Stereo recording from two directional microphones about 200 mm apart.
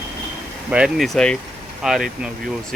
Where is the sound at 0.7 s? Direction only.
5° right (ahead or behind).